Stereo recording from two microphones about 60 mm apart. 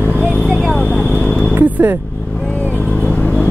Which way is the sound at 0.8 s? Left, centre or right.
Centre.